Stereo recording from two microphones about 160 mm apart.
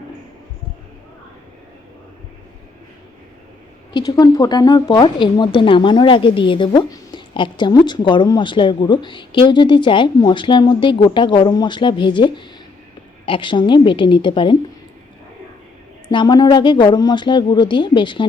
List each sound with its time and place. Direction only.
3.9 s a woman's voice: 25° left (ahead or behind)
16.1 s a woman's voice: 25° left (ahead or behind)